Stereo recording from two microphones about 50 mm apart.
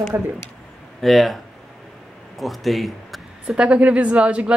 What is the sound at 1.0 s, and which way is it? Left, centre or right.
Speech, centre.